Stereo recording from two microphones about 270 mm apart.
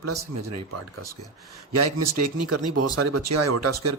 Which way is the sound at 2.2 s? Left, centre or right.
Right.